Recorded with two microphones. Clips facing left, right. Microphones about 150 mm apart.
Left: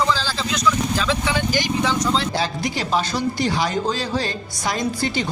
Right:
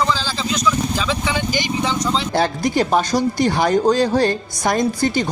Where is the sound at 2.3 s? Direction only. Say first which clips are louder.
Right 6 dB; 50° right (ahead or behind).